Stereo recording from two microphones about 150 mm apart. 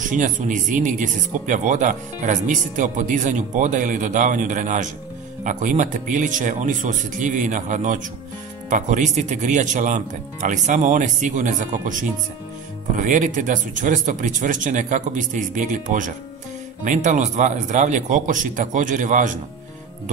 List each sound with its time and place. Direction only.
0.0 s speech: 60° right (ahead or behind)